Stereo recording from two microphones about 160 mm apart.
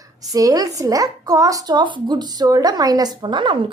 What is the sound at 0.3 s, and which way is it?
A woman's voice, 25° right (ahead or behind).